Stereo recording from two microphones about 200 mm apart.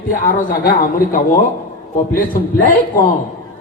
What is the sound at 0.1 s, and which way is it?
A man's voice, 45° left (ahead or behind).